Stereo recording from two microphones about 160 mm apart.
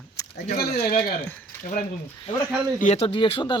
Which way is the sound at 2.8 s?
40° left (ahead or behind).